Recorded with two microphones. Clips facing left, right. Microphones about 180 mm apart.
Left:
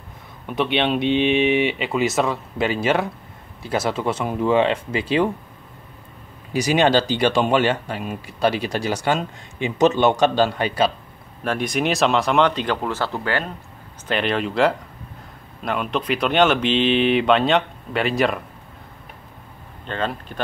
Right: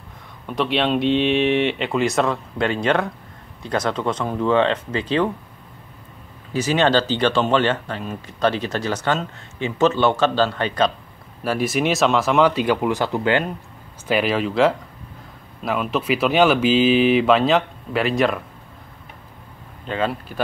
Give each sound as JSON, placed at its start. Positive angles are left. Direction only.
{"t": 0.5, "sound": "speech", "side_deg": 0}
{"t": 6.5, "sound": "speech", "side_deg": 15}
{"t": 11.4, "sound": "speech", "side_deg": -5}
{"t": 14.0, "sound": "speech", "side_deg": -5}
{"t": 19.9, "sound": "speech", "side_deg": -5}